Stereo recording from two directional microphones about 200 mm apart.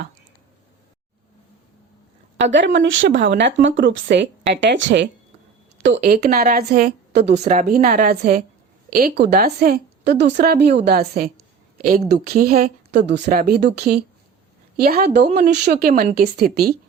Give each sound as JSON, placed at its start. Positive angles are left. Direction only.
{"t": 2.4, "sound": "speech", "side_deg": -65}
{"t": 6.1, "sound": "a woman's voice", "side_deg": -35}
{"t": 7.3, "sound": "a woman's voice", "side_deg": -35}
{"t": 15.3, "sound": "a woman's voice", "side_deg": -35}